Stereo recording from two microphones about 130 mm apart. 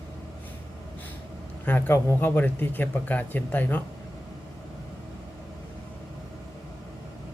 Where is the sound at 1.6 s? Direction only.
15° left (ahead or behind).